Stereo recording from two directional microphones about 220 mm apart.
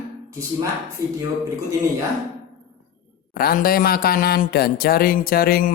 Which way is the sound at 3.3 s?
40° left (ahead or behind).